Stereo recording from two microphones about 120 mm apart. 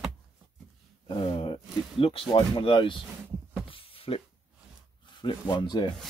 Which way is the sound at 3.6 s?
50° left (ahead or behind).